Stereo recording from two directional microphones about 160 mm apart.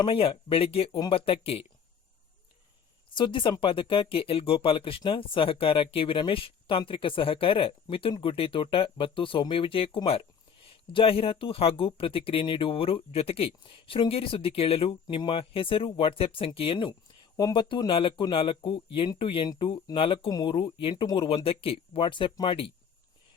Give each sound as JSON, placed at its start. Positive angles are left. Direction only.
{"t": 0.0, "sound": "speech", "side_deg": 35}
{"t": 3.2, "sound": "speech", "side_deg": 30}